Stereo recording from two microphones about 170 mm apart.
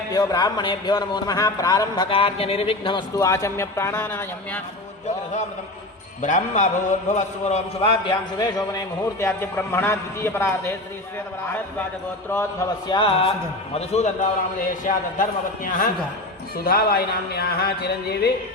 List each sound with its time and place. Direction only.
0.1 s a man's voice: 20° left (ahead or behind)
2.0 s a man's voice: 35° left (ahead or behind)
3.2 s a man's voice: 20° left (ahead or behind)
5.0 s a man's voice: 45° left (ahead or behind); by 10.8 s 15° left (ahead or behind)
12.9 s a man's voice: 30° left (ahead or behind); by 15.9 s 50° left (ahead or behind)
16.6 s a sound: 60° left (ahead or behind)